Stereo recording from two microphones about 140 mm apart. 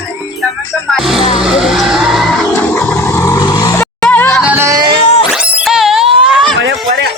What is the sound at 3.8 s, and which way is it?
Music, 10° left (ahead or behind).